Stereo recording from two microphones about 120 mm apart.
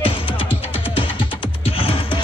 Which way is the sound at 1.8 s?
50° left (ahead or behind).